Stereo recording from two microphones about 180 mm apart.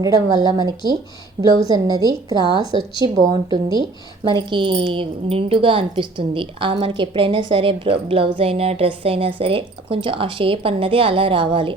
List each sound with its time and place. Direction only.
0.0 s speech: 20° right (ahead or behind)
1.6 s a woman's voice: 20° right (ahead or behind)